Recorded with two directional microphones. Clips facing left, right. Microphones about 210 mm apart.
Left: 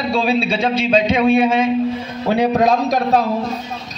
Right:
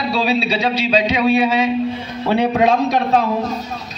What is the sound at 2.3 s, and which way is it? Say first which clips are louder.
Speech: even; 40° left (ahead or behind).